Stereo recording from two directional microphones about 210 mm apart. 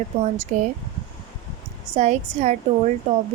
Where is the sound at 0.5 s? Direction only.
35° right (ahead or behind).